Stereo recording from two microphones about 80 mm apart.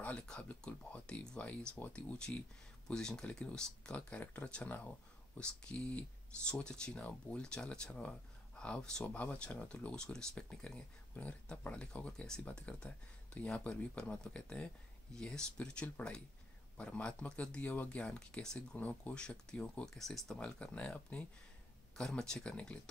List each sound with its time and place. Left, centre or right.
0.0 s speech: centre